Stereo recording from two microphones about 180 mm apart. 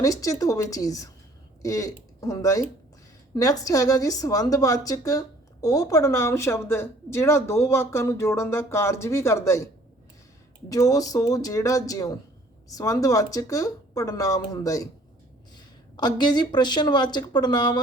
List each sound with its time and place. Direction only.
0.0 s a woman's voice: 20° left (ahead or behind)
10.7 s speech: 20° left (ahead or behind)